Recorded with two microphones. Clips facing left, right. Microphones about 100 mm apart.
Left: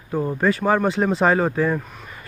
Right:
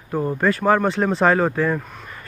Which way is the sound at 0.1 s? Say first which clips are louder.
Even; centre (ahead or behind).